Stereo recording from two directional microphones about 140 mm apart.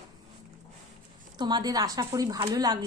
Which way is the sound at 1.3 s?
30° right (ahead or behind).